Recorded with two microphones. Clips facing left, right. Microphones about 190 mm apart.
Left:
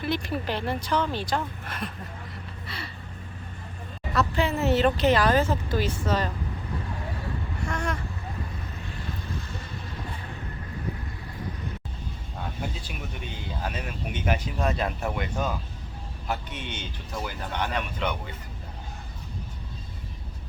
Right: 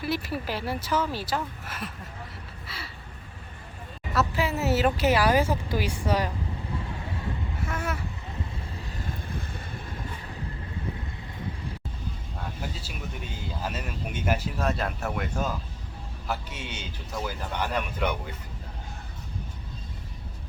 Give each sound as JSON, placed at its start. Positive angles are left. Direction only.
{"t": 0.0, "sound": "speech", "side_deg": -5}
{"t": 2.6, "sound": "a sound", "side_deg": -5}
{"t": 4.1, "sound": "speech", "side_deg": -5}
{"t": 7.6, "sound": "vehicle", "side_deg": -5}
{"t": 8.8, "sound": "vehicle", "side_deg": -40}
{"t": 12.6, "sound": "a sound", "side_deg": 0}
{"t": 16.2, "sound": "speech", "side_deg": -5}